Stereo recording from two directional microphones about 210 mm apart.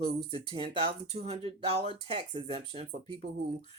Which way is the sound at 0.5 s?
30° right (ahead or behind).